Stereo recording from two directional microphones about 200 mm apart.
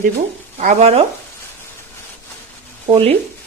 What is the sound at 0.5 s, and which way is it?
Speech, 35° right (ahead or behind).